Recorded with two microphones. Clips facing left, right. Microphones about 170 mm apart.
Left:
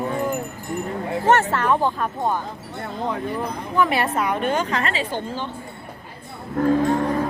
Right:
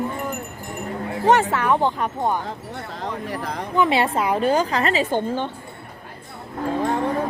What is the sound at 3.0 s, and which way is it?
Speech, 90° right.